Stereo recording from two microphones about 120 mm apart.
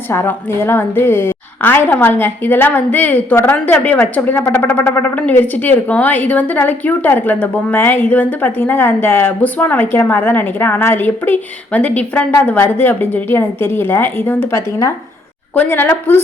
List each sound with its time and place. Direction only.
0.1 s a woman's voice: 20° left (ahead or behind)